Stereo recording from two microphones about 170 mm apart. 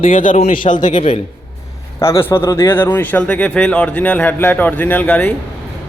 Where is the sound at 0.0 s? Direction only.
50° left (ahead or behind).